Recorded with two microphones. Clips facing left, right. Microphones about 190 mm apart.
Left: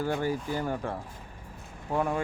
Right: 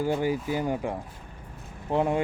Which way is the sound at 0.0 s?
15° right (ahead or behind).